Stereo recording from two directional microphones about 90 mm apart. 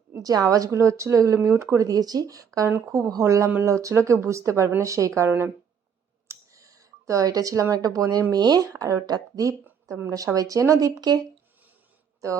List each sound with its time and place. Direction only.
0.2 s a woman's voice: 40° right (ahead or behind)
6.2 s a sound: 35° right (ahead or behind)
8.3 s a woman's voice: 45° right (ahead or behind)